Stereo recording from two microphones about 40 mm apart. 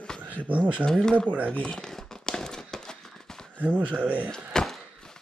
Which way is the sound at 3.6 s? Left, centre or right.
Right.